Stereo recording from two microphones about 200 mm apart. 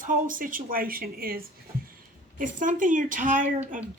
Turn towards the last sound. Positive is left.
turn(degrees=-40)  # may be behind; listen again after turning